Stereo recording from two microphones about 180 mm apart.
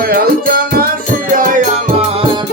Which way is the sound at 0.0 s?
55° right (ahead or behind).